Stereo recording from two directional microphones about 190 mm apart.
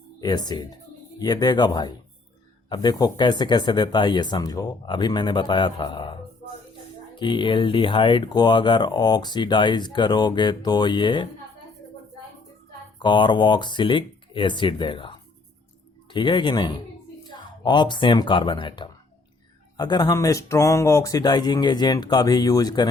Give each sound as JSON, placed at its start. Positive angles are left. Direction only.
{"t": 0.2, "sound": "speech", "side_deg": 20}
{"t": 7.2, "sound": "speech", "side_deg": 25}
{"t": 13.0, "sound": "speech", "side_deg": 25}